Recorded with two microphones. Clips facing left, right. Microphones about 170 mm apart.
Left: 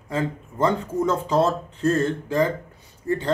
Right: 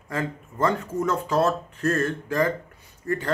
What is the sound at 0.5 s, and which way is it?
Speech, 25° left (ahead or behind).